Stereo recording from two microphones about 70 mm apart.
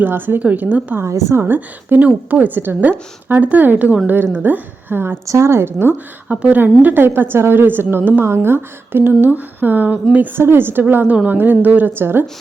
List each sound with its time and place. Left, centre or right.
0.0 s a woman's voice: right
1.0 s a woman's voice: right
1.4 s a woman's voice: right
5.2 s a woman's voice: right
6.2 s a woman's voice: centre